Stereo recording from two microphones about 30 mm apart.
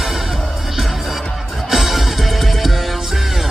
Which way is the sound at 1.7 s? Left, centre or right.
Centre.